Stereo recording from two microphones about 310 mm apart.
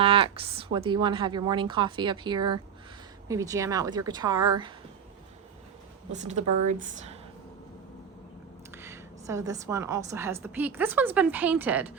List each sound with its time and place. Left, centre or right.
0.0 s a woman's voice: centre
6.1 s speech: right
8.7 s a woman's voice: centre